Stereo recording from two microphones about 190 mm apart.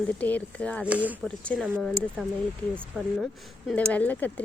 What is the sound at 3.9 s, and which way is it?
Speech, 10° left (ahead or behind).